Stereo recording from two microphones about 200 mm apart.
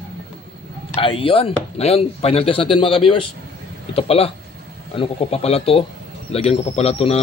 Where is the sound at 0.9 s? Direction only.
25° left (ahead or behind).